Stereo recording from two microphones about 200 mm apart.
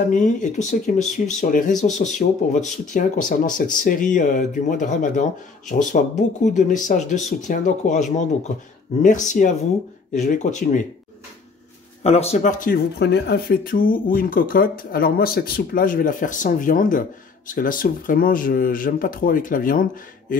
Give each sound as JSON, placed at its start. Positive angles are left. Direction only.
{"t": 0.1, "sound": "speech", "side_deg": 40}
{"t": 9.0, "sound": "speech", "side_deg": 40}
{"t": 12.0, "sound": "speech", "side_deg": 30}